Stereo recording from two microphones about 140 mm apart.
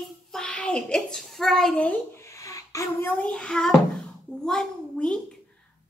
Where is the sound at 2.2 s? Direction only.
20° left (ahead or behind); by 5.2 s 5° left (ahead or behind).